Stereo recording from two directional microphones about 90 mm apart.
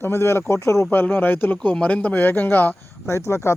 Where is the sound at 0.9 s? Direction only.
20° left (ahead or behind).